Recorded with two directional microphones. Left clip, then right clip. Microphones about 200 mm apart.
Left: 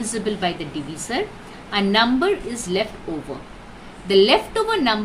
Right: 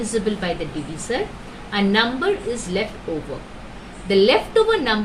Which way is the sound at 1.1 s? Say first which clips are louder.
Right 1 dB; 60° left (ahead or behind).